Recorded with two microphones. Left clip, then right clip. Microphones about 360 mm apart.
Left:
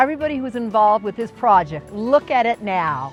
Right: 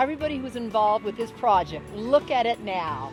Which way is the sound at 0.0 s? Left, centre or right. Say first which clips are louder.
Left 7 dB; left.